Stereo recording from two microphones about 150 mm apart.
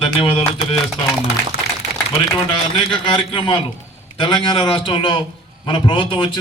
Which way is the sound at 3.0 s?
35° left (ahead or behind).